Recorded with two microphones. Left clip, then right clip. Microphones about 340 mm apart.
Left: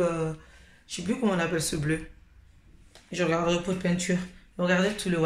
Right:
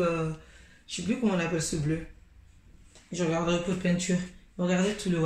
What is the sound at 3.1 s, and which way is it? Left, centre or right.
Speech, centre.